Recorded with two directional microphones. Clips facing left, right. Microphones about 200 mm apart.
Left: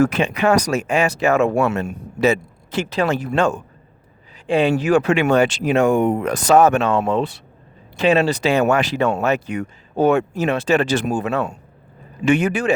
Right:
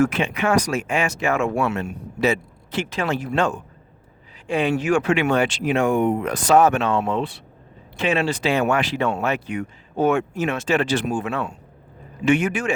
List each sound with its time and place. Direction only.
0.0 s speech: 40° left (ahead or behind)
4.4 s speech: 30° left (ahead or behind)